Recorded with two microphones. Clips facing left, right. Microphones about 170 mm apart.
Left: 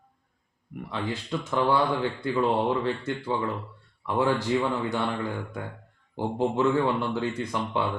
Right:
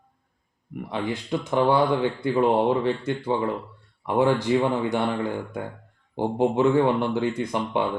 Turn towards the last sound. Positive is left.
turn(degrees=-20)  # may be behind; listen again after turning